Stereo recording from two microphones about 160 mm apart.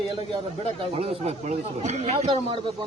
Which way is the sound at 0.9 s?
40° right (ahead or behind).